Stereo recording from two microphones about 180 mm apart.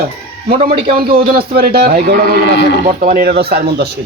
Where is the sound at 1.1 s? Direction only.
55° right (ahead or behind).